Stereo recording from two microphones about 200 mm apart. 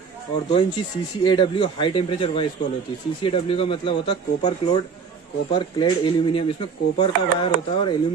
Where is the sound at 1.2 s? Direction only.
25° left (ahead or behind).